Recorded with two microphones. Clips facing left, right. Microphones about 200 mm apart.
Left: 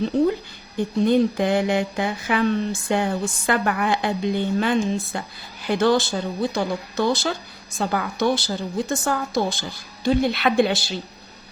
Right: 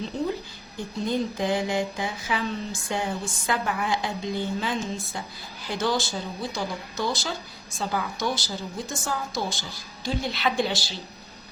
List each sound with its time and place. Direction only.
0.8 s speech: 60° left (ahead or behind)